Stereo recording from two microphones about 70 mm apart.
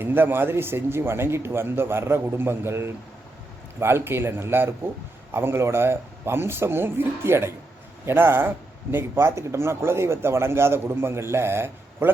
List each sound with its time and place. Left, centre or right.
0.0 s speech: right